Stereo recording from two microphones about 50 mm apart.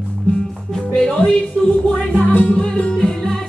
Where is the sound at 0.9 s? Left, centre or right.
Centre.